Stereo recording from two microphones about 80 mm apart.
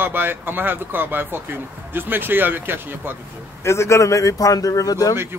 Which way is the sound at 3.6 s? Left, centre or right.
Left.